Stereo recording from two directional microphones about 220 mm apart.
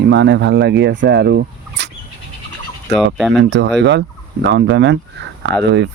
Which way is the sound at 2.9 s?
Centre (ahead or behind).